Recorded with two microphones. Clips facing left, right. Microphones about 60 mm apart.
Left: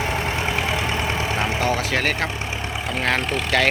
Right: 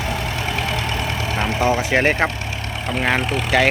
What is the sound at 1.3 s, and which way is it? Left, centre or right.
Vehicle, centre.